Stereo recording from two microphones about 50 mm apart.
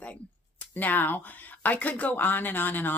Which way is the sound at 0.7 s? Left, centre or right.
Left.